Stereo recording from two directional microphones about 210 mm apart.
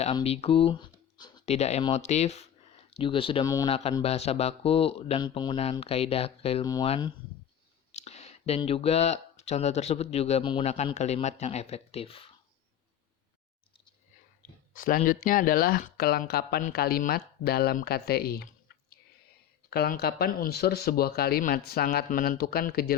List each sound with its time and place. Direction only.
0.0 s a sound: 25° left (ahead or behind)
1.5 s speech: 30° left (ahead or behind)
3.7 s speech: 25° left (ahead or behind)
14.7 s speech: 40° left (ahead or behind)
19.7 s speech: 50° left (ahead or behind)